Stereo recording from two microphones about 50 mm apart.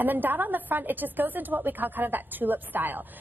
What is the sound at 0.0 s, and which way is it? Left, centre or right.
A woman's voice, right.